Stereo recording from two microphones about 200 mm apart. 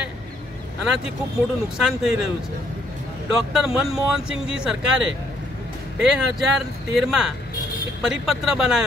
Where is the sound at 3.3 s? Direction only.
Centre (ahead or behind).